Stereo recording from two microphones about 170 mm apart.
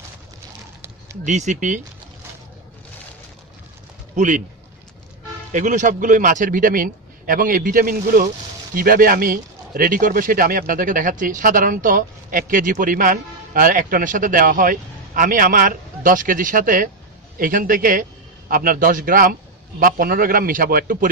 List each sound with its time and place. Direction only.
1.2 s a man's voice: 45° right (ahead or behind)
4.1 s speech: 50° right (ahead or behind)
5.5 s a man's voice: 50° right (ahead or behind)